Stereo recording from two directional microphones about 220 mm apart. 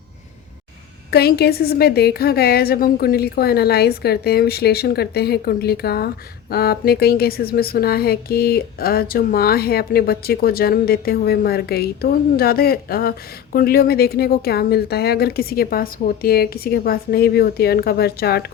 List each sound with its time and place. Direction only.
1.1 s speech: 45° left (ahead or behind)